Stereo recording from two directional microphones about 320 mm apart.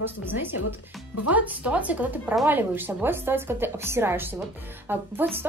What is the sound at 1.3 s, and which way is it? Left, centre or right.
Speech, centre.